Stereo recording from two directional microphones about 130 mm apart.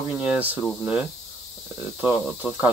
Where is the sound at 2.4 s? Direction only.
Centre (ahead or behind).